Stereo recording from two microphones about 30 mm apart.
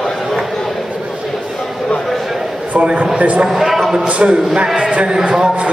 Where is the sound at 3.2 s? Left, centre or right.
Right.